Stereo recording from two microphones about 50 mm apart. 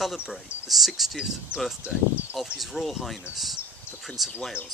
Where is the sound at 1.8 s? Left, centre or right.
Right.